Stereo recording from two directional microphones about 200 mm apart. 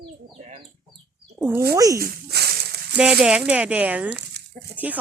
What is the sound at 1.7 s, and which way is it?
Speech, 15° right (ahead or behind).